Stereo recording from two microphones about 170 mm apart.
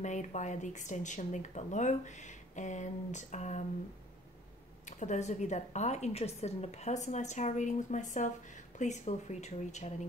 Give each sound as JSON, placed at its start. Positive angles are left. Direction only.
{"t": 0.0, "sound": "a woman's voice", "side_deg": 45}
{"t": 4.8, "sound": "a woman's voice", "side_deg": 45}